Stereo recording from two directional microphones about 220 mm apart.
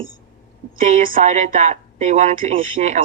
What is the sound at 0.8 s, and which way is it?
A woman's voice, 35° right (ahead or behind).